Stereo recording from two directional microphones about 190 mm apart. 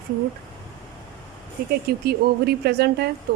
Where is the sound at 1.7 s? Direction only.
55° right (ahead or behind).